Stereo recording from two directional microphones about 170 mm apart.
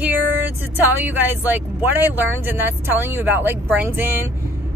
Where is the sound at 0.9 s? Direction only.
10° right (ahead or behind).